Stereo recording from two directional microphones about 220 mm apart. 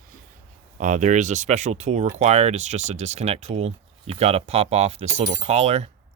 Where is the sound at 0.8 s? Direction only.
35° right (ahead or behind).